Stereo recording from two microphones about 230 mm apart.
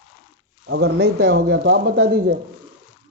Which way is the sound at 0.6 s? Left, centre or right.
Right.